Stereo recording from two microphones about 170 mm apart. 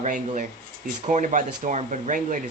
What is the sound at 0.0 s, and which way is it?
Speech, 45° right (ahead or behind).